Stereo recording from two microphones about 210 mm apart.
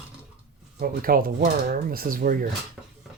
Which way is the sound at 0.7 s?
45° right (ahead or behind).